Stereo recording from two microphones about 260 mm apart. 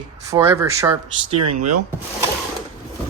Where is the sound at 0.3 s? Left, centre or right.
Centre.